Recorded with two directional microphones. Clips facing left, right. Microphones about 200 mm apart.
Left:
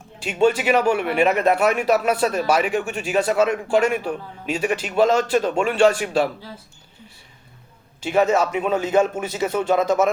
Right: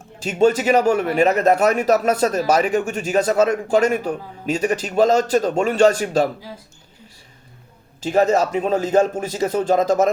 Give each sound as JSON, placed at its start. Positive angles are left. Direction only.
{"t": 0.2, "sound": "a man's voice", "side_deg": -40}
{"t": 8.0, "sound": "a man's voice", "side_deg": -40}